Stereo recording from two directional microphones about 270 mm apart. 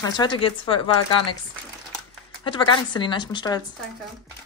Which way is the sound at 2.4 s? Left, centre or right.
Centre.